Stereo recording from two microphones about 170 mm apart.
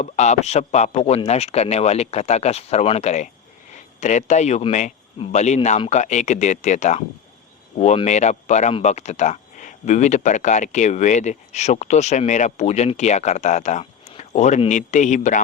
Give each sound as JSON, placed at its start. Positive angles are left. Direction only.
{"t": 0.0, "sound": "speech", "side_deg": 40}